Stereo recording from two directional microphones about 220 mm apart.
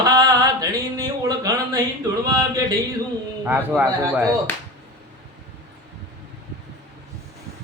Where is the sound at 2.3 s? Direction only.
15° right (ahead or behind).